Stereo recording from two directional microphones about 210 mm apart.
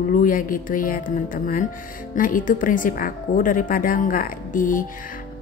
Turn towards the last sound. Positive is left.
turn(degrees=40)  # may be behind; listen again after turning